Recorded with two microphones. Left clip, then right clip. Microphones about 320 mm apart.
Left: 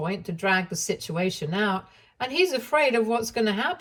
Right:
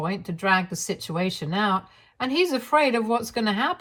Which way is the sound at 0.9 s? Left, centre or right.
Centre.